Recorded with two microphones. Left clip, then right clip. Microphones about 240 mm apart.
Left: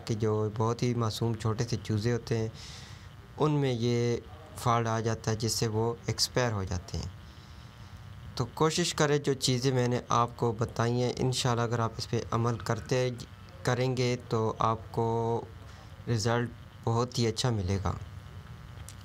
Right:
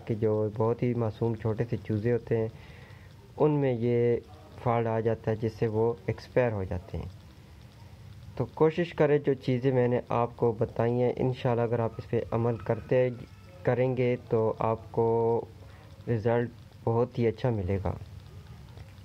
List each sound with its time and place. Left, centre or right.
0.0 s speech: centre
0.3 s speech: left
0.7 s speech: centre
5.7 s speech: left
6.1 s speech: centre
8.4 s speech: centre
12.1 s speech: left
12.4 s speech: centre
15.0 s speech: left
16.1 s speech: centre